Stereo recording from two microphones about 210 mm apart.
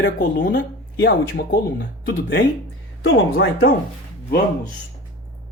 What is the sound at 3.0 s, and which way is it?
Speech, 65° left (ahead or behind).